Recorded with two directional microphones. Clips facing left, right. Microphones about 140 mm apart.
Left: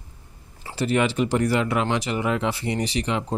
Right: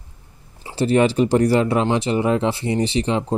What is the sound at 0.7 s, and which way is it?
Speech, 30° right (ahead or behind).